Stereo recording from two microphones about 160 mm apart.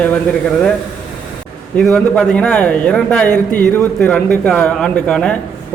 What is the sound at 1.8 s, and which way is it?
A man's voice, 5° left (ahead or behind).